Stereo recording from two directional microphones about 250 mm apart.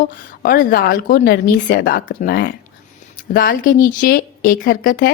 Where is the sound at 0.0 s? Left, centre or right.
Left.